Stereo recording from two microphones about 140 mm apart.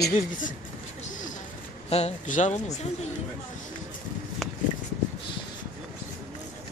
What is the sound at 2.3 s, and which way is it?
Speech, 60° left (ahead or behind).